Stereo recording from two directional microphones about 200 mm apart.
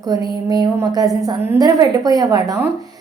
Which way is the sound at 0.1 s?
20° right (ahead or behind).